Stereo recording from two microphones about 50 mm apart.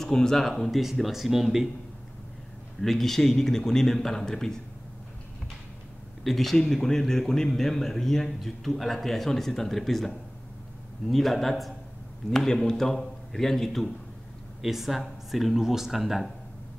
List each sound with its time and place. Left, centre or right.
0.0 s speech: centre
2.8 s a man's voice: centre
6.2 s a man's voice: centre